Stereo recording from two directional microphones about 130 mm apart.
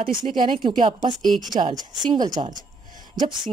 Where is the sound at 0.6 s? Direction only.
35° right (ahead or behind).